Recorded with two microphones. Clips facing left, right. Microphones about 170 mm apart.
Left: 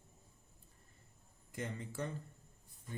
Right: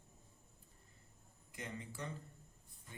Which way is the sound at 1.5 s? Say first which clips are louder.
Left 5 dB; 50° left (ahead or behind).